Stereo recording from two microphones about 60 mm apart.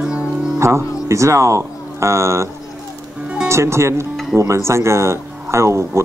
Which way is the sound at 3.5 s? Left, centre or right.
Right.